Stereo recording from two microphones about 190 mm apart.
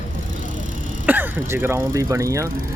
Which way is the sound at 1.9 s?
20° right (ahead or behind).